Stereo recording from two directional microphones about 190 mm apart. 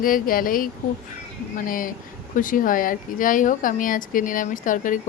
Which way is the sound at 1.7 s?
45° left (ahead or behind).